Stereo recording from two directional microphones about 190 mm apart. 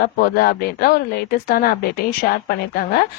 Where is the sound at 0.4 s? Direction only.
55° left (ahead or behind).